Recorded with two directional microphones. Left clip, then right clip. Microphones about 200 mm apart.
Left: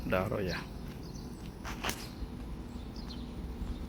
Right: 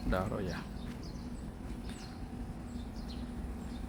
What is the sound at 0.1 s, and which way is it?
Speech, 5° left (ahead or behind).